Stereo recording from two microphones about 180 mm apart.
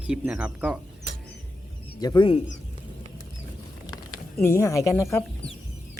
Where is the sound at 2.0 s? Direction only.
25° left (ahead or behind).